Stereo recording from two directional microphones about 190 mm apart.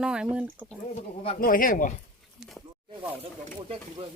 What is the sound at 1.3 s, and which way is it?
Speech, 45° left (ahead or behind).